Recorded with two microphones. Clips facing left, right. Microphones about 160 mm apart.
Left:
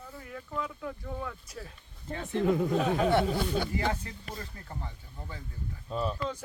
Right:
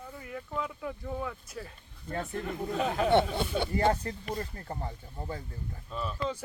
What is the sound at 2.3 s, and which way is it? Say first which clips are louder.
Speech: left 13 dB; 90° left.